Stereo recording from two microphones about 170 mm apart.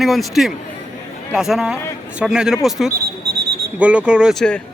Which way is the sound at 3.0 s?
70° right (ahead or behind).